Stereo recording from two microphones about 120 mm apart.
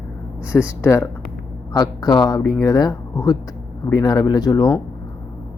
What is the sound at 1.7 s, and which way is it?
Speech, 30° left (ahead or behind).